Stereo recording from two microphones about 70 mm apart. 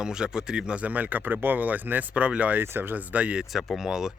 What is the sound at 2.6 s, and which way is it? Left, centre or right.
Speech, right.